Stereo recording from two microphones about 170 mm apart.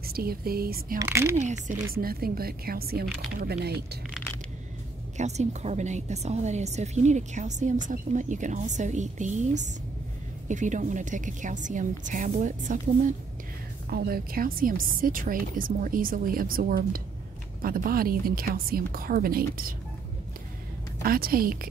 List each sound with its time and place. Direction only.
0.0 s speech: 65° right (ahead or behind)
0.9 s speech: 15° right (ahead or behind)
2.0 s speech: 60° right (ahead or behind)
5.1 s a woman's voice: 40° right (ahead or behind)
13.8 s speech: 60° right (ahead or behind)
21.0 s speech: 60° right (ahead or behind)